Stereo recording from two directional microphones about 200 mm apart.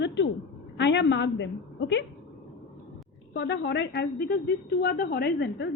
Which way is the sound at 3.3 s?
60° left (ahead or behind).